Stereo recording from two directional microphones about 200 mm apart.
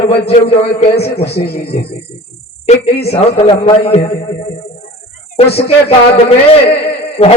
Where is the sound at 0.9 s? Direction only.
55° left (ahead or behind).